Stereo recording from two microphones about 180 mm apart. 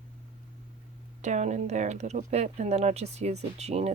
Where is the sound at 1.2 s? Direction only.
40° right (ahead or behind).